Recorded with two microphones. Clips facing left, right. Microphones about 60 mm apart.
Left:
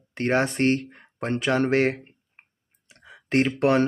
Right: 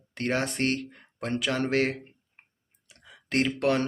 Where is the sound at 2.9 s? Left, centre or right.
Left.